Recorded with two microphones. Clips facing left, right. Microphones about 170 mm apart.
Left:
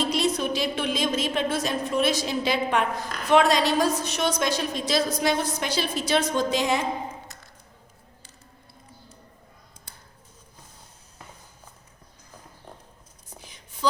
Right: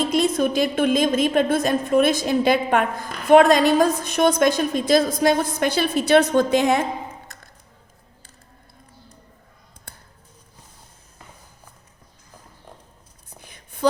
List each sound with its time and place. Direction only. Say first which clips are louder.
0.0 s a woman's voice: right 5 dB; 50° right (ahead or behind)